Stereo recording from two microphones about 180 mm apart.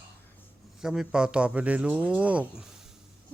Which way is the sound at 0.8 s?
5° right (ahead or behind).